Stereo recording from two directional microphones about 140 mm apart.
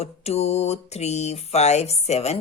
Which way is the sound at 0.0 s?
50° left (ahead or behind).